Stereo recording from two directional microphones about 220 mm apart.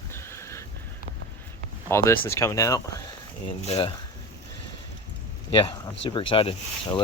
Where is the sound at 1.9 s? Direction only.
10° left (ahead or behind).